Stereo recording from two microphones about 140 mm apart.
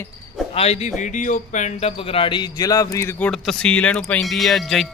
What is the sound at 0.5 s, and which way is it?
Speech, 45° left (ahead or behind).